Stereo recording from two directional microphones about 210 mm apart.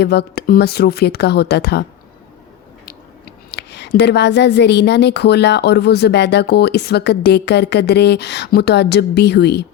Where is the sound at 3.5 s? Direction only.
55° left (ahead or behind).